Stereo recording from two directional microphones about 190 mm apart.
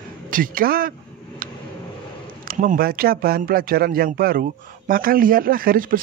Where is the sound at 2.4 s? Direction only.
45° right (ahead or behind).